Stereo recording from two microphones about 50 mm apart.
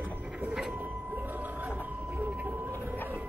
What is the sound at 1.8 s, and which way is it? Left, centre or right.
Vehicle, right.